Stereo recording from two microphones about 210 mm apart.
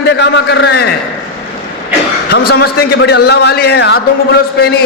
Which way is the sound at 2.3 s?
50° left (ahead or behind).